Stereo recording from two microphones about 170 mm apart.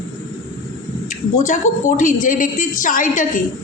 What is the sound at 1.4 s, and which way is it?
A man's voice, 50° left (ahead or behind).